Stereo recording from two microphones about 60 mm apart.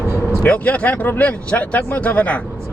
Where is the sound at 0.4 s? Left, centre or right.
Left.